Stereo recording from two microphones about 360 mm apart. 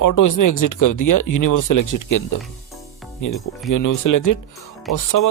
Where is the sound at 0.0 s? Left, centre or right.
Left.